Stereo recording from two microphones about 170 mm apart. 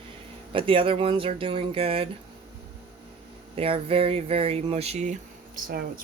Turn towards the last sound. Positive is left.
turn(degrees=-60)  # may be behind; listen again after turning